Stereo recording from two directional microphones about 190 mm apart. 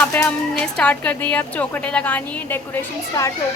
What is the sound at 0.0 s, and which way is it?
A woman's voice, 5° left (ahead or behind).